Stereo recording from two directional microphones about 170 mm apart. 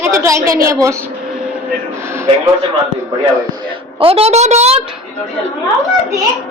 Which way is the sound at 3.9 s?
35° right (ahead or behind).